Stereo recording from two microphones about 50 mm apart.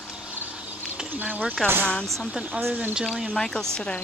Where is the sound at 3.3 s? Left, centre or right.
Centre.